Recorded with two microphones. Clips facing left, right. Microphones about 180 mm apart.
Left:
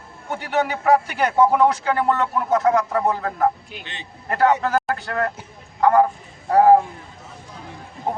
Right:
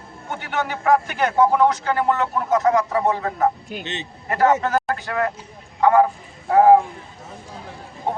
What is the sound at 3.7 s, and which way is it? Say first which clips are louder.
Speech: right 7 dB; 45° right (ahead or behind).